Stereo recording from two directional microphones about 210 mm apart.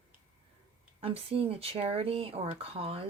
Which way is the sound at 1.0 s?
25° right (ahead or behind).